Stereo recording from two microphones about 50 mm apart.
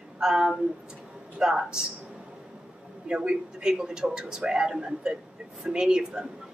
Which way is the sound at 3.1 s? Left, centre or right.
Centre.